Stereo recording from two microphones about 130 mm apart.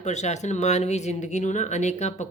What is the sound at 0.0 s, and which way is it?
A woman's voice, 60° left (ahead or behind).